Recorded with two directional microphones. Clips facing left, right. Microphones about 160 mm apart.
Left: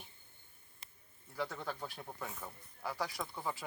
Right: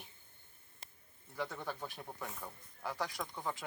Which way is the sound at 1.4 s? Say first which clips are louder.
Left 1 dB; centre (ahead or behind).